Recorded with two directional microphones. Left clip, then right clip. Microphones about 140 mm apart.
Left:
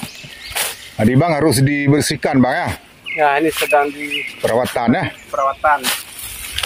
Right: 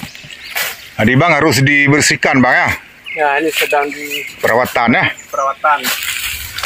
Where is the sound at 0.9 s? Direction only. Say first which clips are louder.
Right 5 dB; centre (ahead or behind).